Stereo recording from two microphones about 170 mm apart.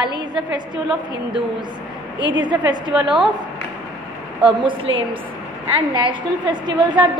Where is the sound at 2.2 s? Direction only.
25° right (ahead or behind).